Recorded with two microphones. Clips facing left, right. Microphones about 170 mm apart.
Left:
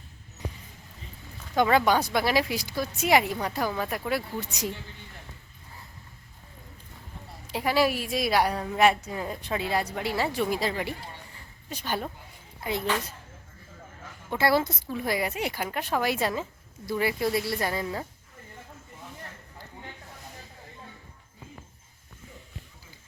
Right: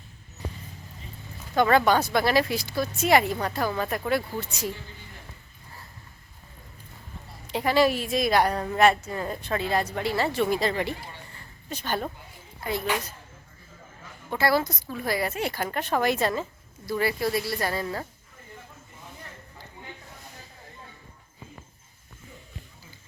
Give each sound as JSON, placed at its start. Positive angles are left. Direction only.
{"t": 1.5, "sound": "a woman's voice", "side_deg": 10}
{"t": 7.4, "sound": "a woman's voice", "side_deg": 5}
{"t": 14.3, "sound": "a woman's voice", "side_deg": 25}